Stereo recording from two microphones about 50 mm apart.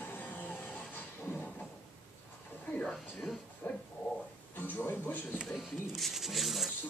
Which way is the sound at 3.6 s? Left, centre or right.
Left.